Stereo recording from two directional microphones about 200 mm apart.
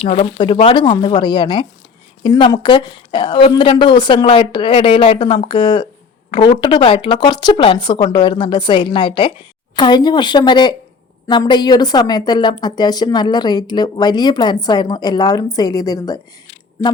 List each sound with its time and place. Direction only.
0.0 s a woman's voice: 30° left (ahead or behind)